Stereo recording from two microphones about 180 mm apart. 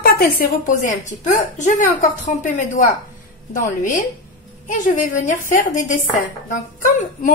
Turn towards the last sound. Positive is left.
turn(degrees=50)  # may be behind; listen again after turning